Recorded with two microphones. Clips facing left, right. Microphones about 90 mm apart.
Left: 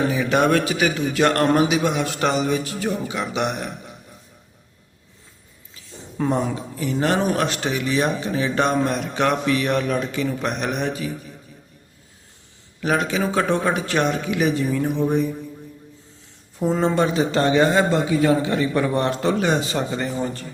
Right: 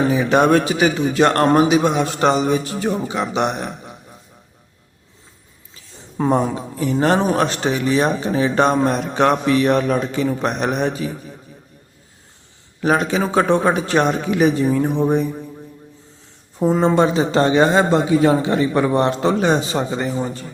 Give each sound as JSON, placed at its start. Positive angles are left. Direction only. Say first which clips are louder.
{"t": 0.1, "sound": "speech", "louder": "right 4 dB", "side_deg": -30}
{"t": 6.2, "sound": "speech", "louder": "right 4 dB", "side_deg": -35}
{"t": 12.8, "sound": "speech", "louder": "right 4 dB", "side_deg": -35}
{"t": 16.6, "sound": "a man's voice", "louder": "right 4 dB", "side_deg": -15}